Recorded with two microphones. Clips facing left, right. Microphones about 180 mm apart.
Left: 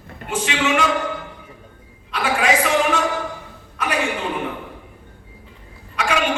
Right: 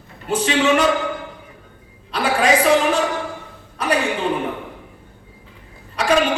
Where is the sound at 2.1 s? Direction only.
35° right (ahead or behind).